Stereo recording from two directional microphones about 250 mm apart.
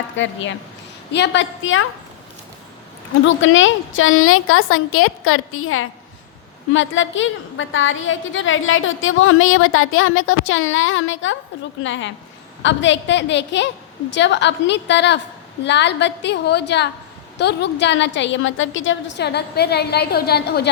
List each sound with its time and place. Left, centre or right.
0.2 s a woman's voice: left
3.2 s a woman's voice: left